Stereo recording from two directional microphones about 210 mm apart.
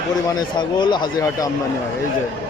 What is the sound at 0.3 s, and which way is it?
Speech, 20° left (ahead or behind).